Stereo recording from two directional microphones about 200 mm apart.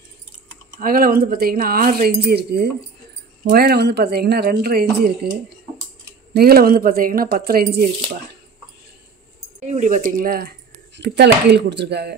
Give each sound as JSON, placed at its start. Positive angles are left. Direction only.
{"t": 0.7, "sound": "speech", "side_deg": -45}
{"t": 6.3, "sound": "speech", "side_deg": -50}
{"t": 9.6, "sound": "speech", "side_deg": -40}
{"t": 11.0, "sound": "speech", "side_deg": -55}